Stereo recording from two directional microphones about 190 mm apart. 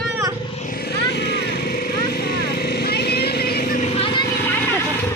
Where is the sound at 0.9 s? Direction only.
60° left (ahead or behind).